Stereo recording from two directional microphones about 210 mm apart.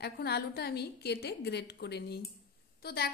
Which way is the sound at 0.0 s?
50° left (ahead or behind).